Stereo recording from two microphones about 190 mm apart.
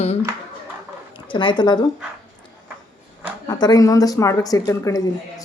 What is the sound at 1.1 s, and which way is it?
Speech, 25° left (ahead or behind).